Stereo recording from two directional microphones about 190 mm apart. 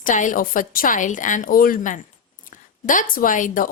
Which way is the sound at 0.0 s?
40° left (ahead or behind).